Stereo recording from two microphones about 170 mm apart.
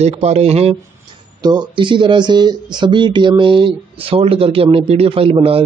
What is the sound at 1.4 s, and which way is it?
Speech, 25° right (ahead or behind).